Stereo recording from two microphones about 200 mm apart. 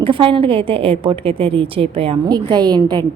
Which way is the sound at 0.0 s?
25° right (ahead or behind).